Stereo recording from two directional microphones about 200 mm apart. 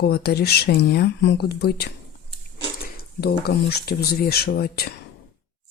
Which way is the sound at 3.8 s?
50° left (ahead or behind).